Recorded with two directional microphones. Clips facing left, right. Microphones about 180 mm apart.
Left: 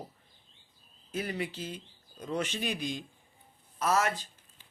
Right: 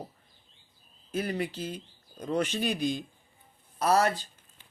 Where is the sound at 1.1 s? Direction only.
45° right (ahead or behind).